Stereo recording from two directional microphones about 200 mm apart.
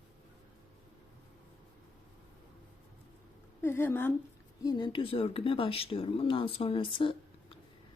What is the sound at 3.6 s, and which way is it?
Speech, 10° left (ahead or behind).